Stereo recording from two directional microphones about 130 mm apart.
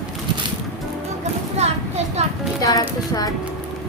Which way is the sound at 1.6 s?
55° right (ahead or behind).